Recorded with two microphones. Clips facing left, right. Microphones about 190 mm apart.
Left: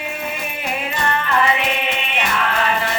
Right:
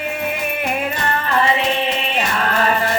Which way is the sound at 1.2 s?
30° right (ahead or behind).